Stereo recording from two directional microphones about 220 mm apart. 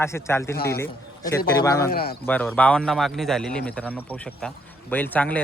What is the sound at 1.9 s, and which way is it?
Speech, 45° left (ahead or behind).